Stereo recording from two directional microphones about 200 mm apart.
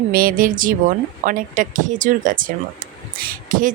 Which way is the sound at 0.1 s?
45° right (ahead or behind).